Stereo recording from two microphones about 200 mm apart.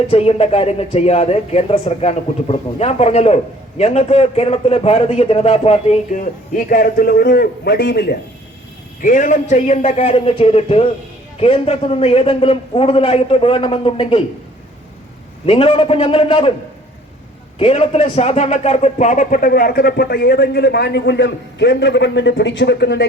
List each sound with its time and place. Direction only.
0.1 s speech: 30° left (ahead or behind); by 8.2 s 50° left (ahead or behind)
9.0 s a man's voice: 40° left (ahead or behind)
15.4 s a man's voice: 25° left (ahead or behind)
17.6 s a man's voice: 30° left (ahead or behind); by 23.0 s 55° left (ahead or behind)